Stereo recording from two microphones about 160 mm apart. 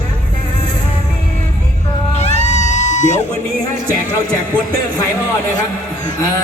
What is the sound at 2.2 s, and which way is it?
Music, 45° left (ahead or behind).